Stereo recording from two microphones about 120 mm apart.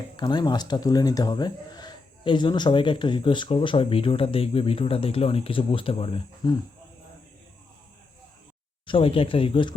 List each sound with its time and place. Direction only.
0.2 s speech: 35° left (ahead or behind)
6.4 s speech: 40° left (ahead or behind)
8.9 s speech: 50° left (ahead or behind)